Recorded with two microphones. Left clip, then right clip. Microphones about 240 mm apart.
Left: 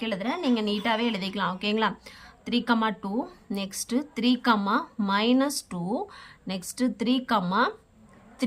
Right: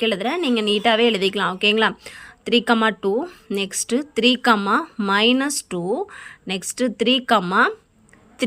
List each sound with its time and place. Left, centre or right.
0.0 s speech: centre